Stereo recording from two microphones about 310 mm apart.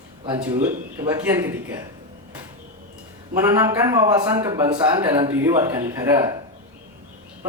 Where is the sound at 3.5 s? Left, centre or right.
Centre.